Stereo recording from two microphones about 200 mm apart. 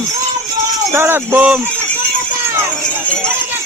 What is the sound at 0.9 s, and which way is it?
Speech, 10° right (ahead or behind).